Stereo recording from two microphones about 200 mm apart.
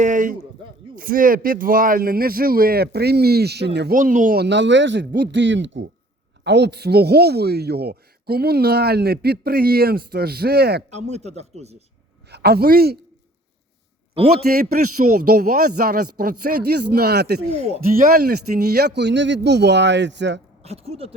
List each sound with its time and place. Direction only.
0.0 s a sound: 40° right (ahead or behind)
0.9 s speech: 45° right (ahead or behind)
3.9 s a man's voice: 40° right (ahead or behind)
10.9 s speech: 35° right (ahead or behind)
12.3 s a man's voice: 50° right (ahead or behind)
14.3 s speech: 50° right (ahead or behind)
17.5 s a man's voice: 35° right (ahead or behind); by 20.4 s 60° right (ahead or behind)
20.7 s speech: 30° right (ahead or behind)